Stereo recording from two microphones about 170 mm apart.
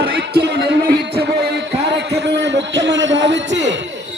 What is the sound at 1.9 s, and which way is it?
A man's voice, 90° right.